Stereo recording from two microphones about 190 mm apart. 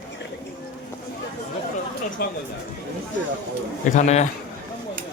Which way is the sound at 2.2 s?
55° left (ahead or behind).